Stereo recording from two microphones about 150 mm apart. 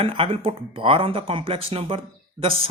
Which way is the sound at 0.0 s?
40° right (ahead or behind).